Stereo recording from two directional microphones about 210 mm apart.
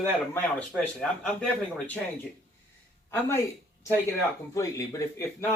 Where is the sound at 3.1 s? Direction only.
10° left (ahead or behind).